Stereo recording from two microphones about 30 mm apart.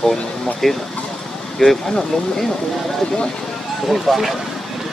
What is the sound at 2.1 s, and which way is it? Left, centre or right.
Speech, centre.